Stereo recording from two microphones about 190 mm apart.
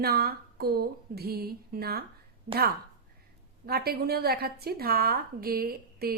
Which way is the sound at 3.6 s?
55° right (ahead or behind).